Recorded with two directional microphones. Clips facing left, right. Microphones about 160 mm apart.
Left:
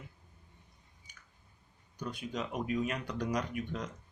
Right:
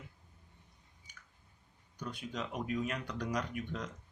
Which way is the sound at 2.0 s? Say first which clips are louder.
Left 3 dB; 15° left (ahead or behind).